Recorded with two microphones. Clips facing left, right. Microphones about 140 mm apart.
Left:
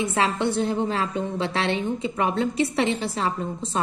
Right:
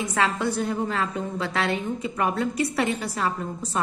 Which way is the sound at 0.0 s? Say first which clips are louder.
Left 2 dB; 25° left (ahead or behind).